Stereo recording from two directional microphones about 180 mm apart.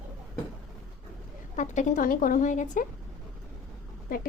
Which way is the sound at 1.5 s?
45° left (ahead or behind).